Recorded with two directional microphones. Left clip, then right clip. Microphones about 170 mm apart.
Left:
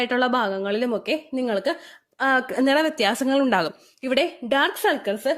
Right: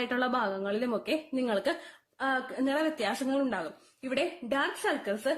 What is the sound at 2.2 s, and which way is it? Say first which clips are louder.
A woman's voice: left 10 dB; 50° left (ahead or behind).